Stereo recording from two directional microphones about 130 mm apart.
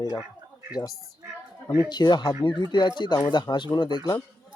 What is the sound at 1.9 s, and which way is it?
Speech, 35° left (ahead or behind).